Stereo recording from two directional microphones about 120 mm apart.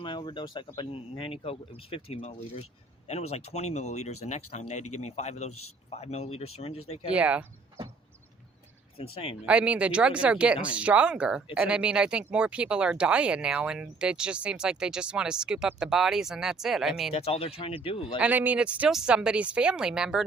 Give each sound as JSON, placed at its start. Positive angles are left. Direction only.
{"t": 0.0, "sound": "speech", "side_deg": 45}
{"t": 7.1, "sound": "speech", "side_deg": -10}
{"t": 9.0, "sound": "speech", "side_deg": 50}
{"t": 9.5, "sound": "speech", "side_deg": -10}
{"t": 17.2, "sound": "speech", "side_deg": 55}
{"t": 18.2, "sound": "speech", "side_deg": -15}